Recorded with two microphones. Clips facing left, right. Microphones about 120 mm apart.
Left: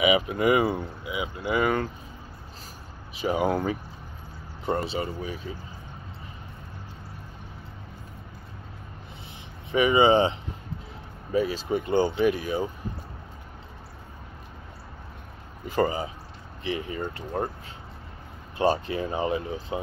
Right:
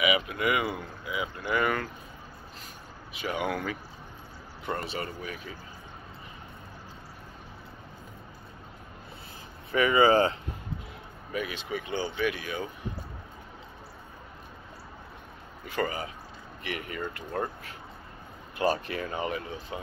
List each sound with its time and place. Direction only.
0.0 s speech: 30° left (ahead or behind)
3.1 s speech: 35° left (ahead or behind)
4.8 s speech: 25° left (ahead or behind)
9.7 s speech: 20° left (ahead or behind)
11.3 s speech: 35° left (ahead or behind)
15.7 s speech: 30° left (ahead or behind)